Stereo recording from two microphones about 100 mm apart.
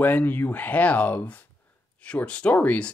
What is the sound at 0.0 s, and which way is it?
Speech, 20° left (ahead or behind).